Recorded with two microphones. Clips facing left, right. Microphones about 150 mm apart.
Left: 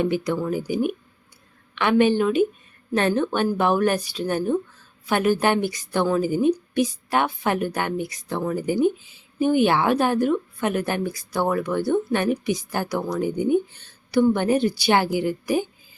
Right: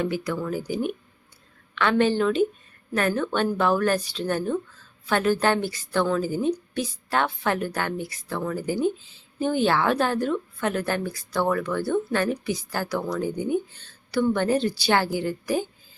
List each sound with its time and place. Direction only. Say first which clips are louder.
0.0 s a woman's voice: left 4 dB; 20° left (ahead or behind)
2.9 s a woman's voice: left 3 dB; 25° left (ahead or behind)